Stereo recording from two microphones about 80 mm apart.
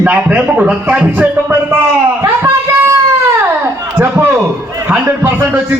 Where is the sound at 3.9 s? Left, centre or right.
Right.